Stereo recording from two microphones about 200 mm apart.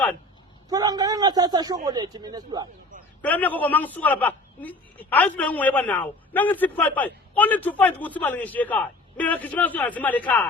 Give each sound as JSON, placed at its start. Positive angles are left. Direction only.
{"t": 0.7, "sound": "a man's voice", "side_deg": -20}
{"t": 3.2, "sound": "a man's voice", "side_deg": 10}